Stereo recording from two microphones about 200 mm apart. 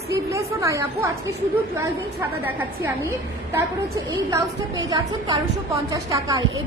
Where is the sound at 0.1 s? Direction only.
15° right (ahead or behind).